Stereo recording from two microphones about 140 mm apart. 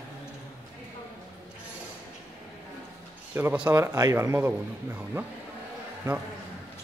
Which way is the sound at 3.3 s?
15° right (ahead or behind).